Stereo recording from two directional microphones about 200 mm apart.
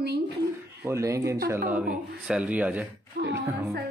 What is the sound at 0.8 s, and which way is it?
Speech, 15° right (ahead or behind).